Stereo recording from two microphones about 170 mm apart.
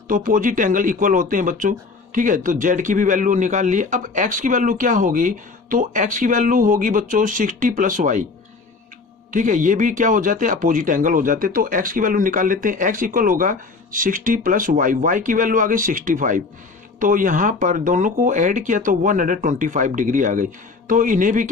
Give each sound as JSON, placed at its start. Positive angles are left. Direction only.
{"t": 0.1, "sound": "speech", "side_deg": -50}
{"t": 9.3, "sound": "speech", "side_deg": -50}